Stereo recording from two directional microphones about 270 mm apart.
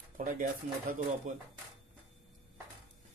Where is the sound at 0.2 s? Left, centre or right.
Right.